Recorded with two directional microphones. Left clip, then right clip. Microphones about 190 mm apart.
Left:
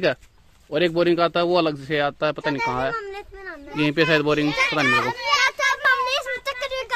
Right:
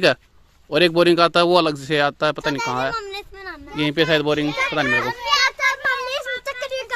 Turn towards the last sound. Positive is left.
turn(degrees=5)  # may be behind; listen again after turning